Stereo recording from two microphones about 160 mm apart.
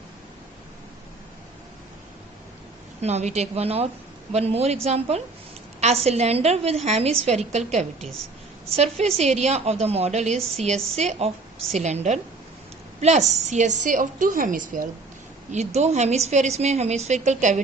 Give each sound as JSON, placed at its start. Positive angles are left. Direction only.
{"t": 3.0, "sound": "a woman's voice", "side_deg": -45}
{"t": 15.5, "sound": "a woman's voice", "side_deg": -45}